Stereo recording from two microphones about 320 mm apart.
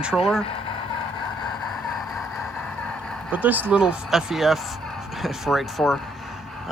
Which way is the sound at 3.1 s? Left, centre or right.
Centre.